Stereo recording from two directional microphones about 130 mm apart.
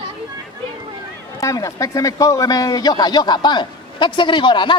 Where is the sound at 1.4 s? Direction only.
25° left (ahead or behind).